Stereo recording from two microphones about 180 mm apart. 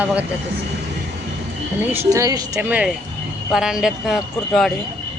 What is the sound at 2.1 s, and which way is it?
Speech, 20° right (ahead or behind).